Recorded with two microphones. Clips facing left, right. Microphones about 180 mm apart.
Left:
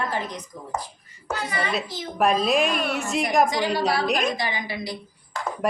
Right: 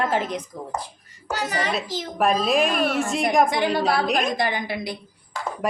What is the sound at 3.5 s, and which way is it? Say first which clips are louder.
Speech: right 2 dB; 55° right (ahead or behind).